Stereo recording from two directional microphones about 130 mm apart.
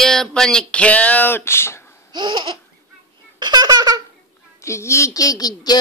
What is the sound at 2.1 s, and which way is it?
Laughter, 35° right (ahead or behind).